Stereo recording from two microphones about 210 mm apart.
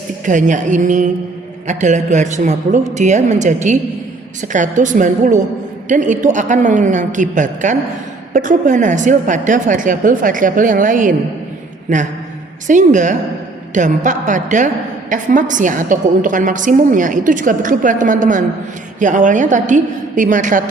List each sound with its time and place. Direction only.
0.3 s a woman's voice: 35° right (ahead or behind)